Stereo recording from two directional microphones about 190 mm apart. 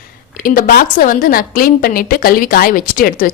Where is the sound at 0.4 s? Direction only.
50° left (ahead or behind).